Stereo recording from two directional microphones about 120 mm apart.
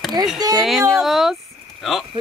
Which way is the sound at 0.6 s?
Centre (ahead or behind).